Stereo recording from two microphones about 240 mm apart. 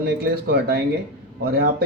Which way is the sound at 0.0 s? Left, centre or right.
Right.